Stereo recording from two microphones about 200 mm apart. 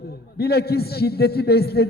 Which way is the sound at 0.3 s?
50° left (ahead or behind).